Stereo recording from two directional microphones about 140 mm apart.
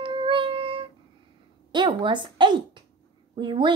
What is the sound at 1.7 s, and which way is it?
Speech, 35° right (ahead or behind).